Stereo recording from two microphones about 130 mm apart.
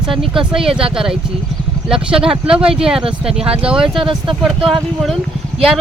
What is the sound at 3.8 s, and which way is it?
Speech, 40° right (ahead or behind).